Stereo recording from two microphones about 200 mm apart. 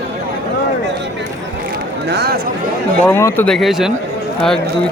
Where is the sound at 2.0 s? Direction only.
55° right (ahead or behind).